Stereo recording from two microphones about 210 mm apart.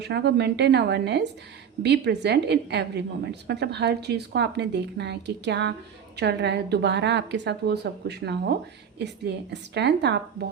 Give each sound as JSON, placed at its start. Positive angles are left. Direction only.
{"t": 0.0, "sound": "a woman's voice", "side_deg": -55}